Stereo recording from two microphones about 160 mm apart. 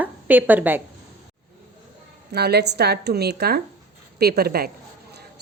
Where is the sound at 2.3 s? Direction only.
90° right; by 4.7 s 75° right (ahead or behind).